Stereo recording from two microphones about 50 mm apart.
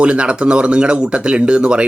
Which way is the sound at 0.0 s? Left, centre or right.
Right.